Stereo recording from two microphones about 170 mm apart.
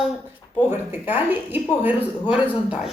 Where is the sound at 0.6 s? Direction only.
10° right (ahead or behind).